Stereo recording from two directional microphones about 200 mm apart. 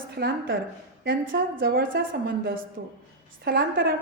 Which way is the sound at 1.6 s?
45° right (ahead or behind).